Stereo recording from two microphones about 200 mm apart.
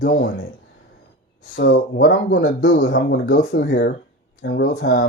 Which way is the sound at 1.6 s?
55° left (ahead or behind).